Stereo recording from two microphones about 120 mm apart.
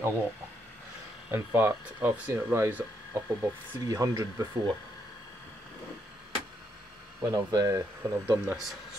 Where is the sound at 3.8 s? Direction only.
25° right (ahead or behind).